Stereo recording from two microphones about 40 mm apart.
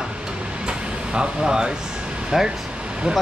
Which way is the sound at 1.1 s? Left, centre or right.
Centre.